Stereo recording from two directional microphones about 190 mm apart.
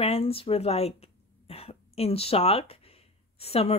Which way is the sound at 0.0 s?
30° left (ahead or behind).